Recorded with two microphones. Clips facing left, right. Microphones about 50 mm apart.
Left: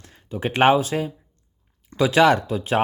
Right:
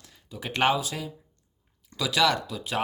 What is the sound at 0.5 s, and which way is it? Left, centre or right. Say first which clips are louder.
Speech: left 7 dB; left.